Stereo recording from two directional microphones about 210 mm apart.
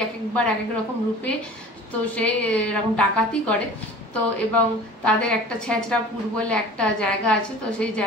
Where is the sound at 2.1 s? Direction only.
5° left (ahead or behind).